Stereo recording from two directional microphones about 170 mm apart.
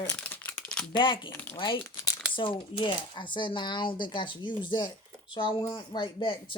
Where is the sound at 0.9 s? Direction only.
30° left (ahead or behind).